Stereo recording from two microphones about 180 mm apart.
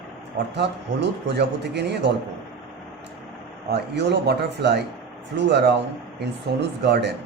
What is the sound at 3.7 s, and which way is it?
Speech, 70° right (ahead or behind).